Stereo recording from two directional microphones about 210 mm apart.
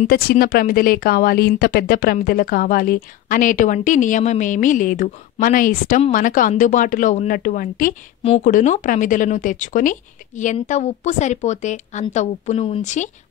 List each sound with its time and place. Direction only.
0.0 s a woman's voice: 45° left (ahead or behind)